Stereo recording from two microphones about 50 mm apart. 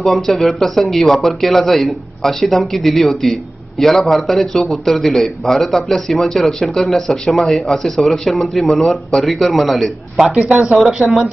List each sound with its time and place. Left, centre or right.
0.0 s a man's voice: centre
10.1 s speech: centre